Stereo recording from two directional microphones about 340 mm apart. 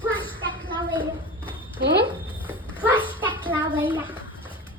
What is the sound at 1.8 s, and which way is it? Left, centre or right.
Speech, right.